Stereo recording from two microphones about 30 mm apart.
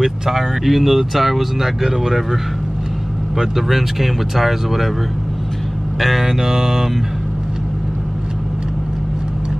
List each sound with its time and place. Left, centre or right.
0.0 s speech: centre
0.7 s speech: centre
1.8 s mantra: centre
3.3 s speech: centre
5.9 s speech: centre
6.2 s mantra: centre